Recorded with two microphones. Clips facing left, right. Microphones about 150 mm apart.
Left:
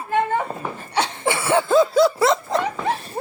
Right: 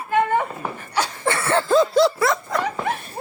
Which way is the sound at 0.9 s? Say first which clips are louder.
Left 1 dB; 25° left (ahead or behind).